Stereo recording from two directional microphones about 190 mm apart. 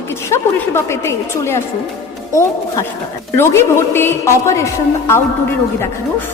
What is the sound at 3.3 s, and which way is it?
A woman's voice, 15° left (ahead or behind).